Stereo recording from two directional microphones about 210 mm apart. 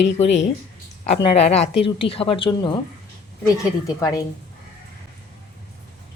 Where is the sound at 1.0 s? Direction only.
30° left (ahead or behind).